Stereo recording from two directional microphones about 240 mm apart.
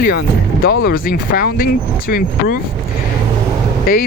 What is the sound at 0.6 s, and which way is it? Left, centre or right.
Speech, left.